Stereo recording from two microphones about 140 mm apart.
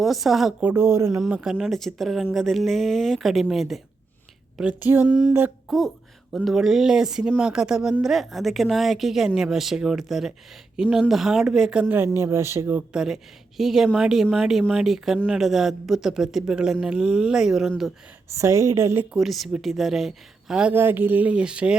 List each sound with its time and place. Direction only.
0.0 s speech: centre (ahead or behind)
0.7 s a woman's voice: 15° right (ahead or behind)
1.3 s speech: 5° right (ahead or behind)
5.6 s speech: centre (ahead or behind)
18.3 s a woman's voice: 20° right (ahead or behind)
19.1 s speech: centre (ahead or behind)